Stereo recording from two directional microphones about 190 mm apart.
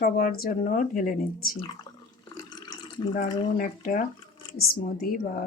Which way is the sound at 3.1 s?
45° left (ahead or behind).